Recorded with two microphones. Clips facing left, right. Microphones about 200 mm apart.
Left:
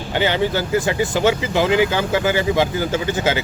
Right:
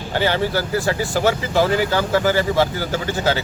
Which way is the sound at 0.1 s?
15° left (ahead or behind).